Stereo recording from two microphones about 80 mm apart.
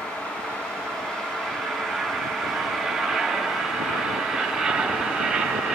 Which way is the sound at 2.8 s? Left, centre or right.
Centre.